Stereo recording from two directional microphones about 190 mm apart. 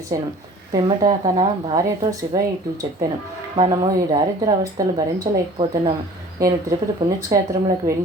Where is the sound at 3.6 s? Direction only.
25° right (ahead or behind).